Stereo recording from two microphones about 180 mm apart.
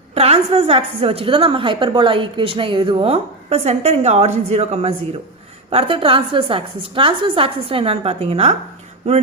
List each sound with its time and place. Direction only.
0.1 s a woman's voice: 35° right (ahead or behind)